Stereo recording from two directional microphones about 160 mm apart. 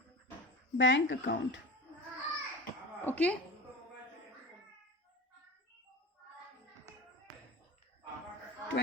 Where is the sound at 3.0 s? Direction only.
10° left (ahead or behind).